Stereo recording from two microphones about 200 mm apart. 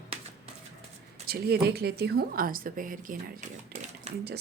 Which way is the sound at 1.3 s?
50° right (ahead or behind).